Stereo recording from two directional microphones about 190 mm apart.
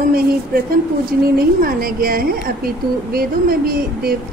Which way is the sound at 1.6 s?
50° right (ahead or behind).